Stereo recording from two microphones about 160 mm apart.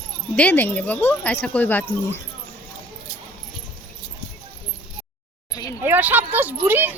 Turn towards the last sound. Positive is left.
turn(degrees=-10)  # may be behind; listen again after turning